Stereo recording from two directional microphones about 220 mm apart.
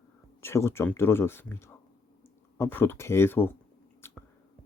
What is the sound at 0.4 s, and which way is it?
Speech, 10° left (ahead or behind).